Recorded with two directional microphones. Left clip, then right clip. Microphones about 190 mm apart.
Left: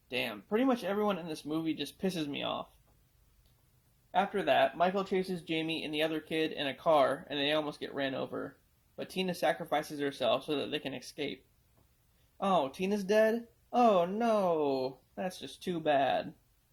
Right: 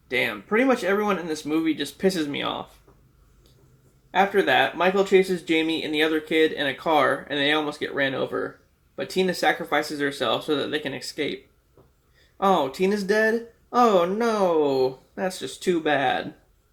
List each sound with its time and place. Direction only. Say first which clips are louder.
0.1 s speech: right 10 dB; 35° left (ahead or behind)
4.1 s speech: right 9 dB; 40° left (ahead or behind)
12.4 s speech: right 9 dB; 40° left (ahead or behind)